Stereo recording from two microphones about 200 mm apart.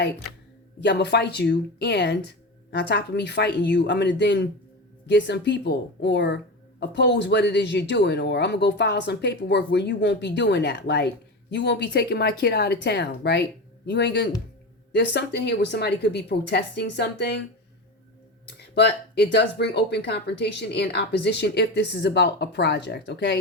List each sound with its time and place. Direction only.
0.8 s speech: 60° left (ahead or behind)
18.4 s speech: 55° left (ahead or behind)